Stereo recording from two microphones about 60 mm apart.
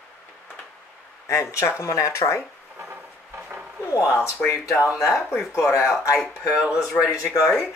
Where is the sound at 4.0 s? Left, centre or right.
Left.